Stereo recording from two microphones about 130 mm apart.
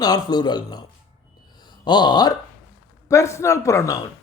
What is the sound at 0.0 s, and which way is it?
A man's voice, 30° left (ahead or behind).